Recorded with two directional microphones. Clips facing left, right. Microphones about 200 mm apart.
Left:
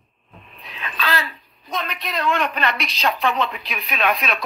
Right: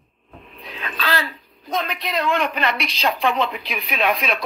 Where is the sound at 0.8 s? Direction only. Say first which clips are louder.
Even; 40° right (ahead or behind).